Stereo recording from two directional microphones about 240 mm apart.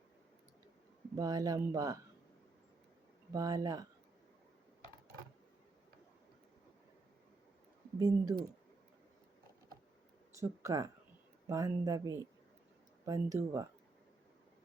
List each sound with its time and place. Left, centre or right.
1.1 s speech: centre
3.3 s speech: centre
7.9 s speech: centre
10.3 s speech: centre